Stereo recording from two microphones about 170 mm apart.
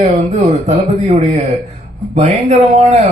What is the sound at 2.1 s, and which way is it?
Speech, 40° right (ahead or behind).